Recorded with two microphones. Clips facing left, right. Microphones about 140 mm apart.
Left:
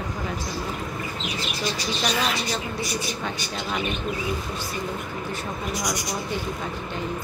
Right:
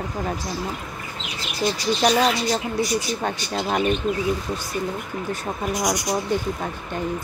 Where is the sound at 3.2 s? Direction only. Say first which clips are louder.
Right 5 dB; 50° right (ahead or behind).